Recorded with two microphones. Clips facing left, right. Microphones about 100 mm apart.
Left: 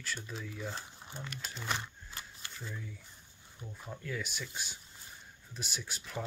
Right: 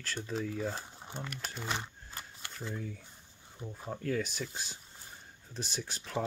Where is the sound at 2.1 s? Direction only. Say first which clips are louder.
Right 2 dB; 50° right (ahead or behind).